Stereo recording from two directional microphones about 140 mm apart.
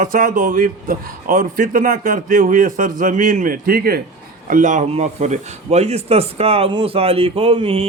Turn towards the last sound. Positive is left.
turn(degrees=-45)  # may be behind; listen again after turning